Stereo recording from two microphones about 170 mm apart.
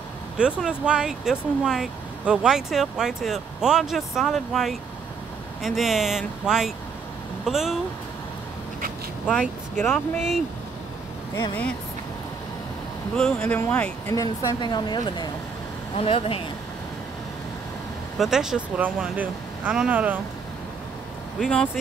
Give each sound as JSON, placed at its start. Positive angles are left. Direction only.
{"t": 0.4, "sound": "speech", "side_deg": -5}
{"t": 9.3, "sound": "speech", "side_deg": 5}
{"t": 13.1, "sound": "speech", "side_deg": 5}
{"t": 14.1, "sound": "a woman's voice", "side_deg": 25}
{"t": 18.1, "sound": "speech", "side_deg": 0}
{"t": 21.4, "sound": "speech", "side_deg": 5}